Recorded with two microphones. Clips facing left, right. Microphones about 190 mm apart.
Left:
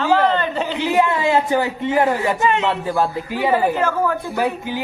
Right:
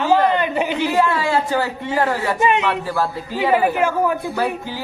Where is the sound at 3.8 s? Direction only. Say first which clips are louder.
Right 1 dB; 15° right (ahead or behind).